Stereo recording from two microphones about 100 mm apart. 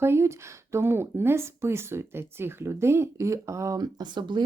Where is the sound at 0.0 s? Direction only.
25° right (ahead or behind).